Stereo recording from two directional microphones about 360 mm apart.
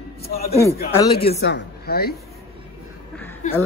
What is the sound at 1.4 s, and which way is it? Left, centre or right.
Speech, left.